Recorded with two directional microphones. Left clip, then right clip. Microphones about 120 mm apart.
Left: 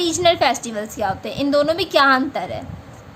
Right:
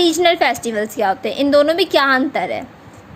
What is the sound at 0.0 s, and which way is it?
A woman's voice, 40° right (ahead or behind).